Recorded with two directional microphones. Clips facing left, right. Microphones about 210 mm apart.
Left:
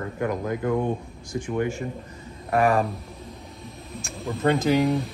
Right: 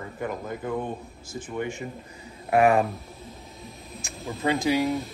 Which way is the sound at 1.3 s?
70° left (ahead or behind).